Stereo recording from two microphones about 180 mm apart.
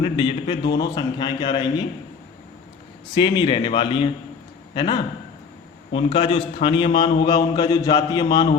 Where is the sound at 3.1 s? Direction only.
25° left (ahead or behind).